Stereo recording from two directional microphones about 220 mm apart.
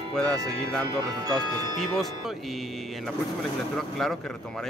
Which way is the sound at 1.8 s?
Centre (ahead or behind).